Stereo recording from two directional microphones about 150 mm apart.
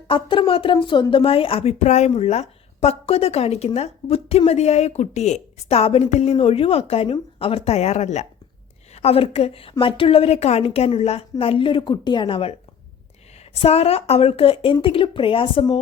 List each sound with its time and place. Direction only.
0.1 s a woman's voice: 35° left (ahead or behind)